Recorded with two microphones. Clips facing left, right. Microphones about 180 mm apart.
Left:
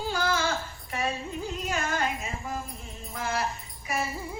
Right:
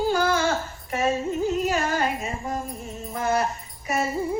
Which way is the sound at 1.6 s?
40° right (ahead or behind).